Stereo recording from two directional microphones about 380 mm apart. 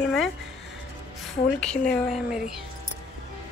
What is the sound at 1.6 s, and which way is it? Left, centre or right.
Speech, centre.